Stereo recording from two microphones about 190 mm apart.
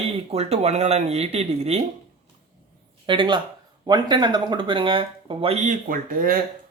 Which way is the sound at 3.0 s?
25° right (ahead or behind).